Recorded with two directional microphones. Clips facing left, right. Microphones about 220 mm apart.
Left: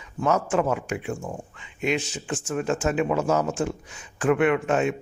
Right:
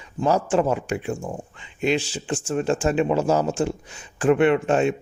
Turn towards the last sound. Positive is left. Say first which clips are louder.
# right 3 dB
turn(degrees=-30)  # may be behind; listen again after turning